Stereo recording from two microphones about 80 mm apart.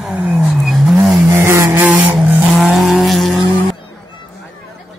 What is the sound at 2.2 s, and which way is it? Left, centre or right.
Vehicle, centre.